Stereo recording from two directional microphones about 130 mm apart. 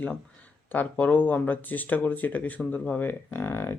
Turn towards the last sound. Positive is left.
turn(degrees=20)  # may be behind; listen again after turning